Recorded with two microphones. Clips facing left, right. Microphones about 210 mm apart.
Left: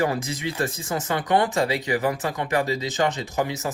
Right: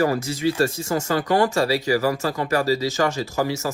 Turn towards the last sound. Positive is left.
turn(degrees=20)  # may be behind; listen again after turning